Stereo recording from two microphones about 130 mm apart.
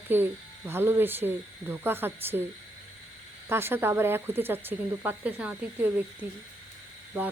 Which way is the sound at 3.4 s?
20° right (ahead or behind).